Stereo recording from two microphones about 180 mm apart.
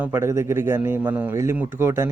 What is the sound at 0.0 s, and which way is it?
A man's voice, 15° right (ahead or behind).